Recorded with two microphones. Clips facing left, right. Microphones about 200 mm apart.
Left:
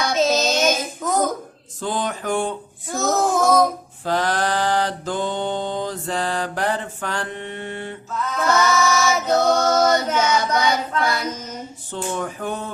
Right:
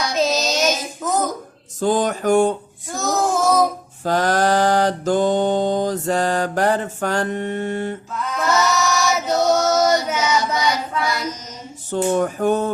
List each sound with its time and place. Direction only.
0.0 s child singing: centre (ahead or behind)
1.0 s a sound: centre (ahead or behind)
1.8 s mantra: 45° right (ahead or behind)
2.9 s child singing: centre (ahead or behind)
4.0 s mantra: 45° right (ahead or behind)
8.4 s choir: centre (ahead or behind)
10.2 s a sound: 55° left (ahead or behind)
12.1 s mantra: 45° right (ahead or behind)